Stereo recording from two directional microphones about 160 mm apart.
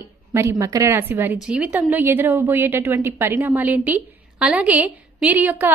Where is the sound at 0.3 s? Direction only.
20° right (ahead or behind).